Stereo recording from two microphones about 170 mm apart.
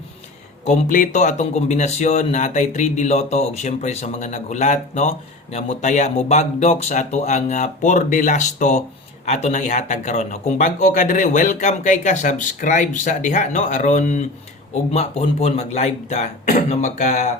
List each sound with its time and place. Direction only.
0.6 s speech: 45° left (ahead or behind)